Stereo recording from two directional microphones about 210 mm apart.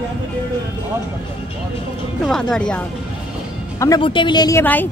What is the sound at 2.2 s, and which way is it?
Speech, centre (ahead or behind).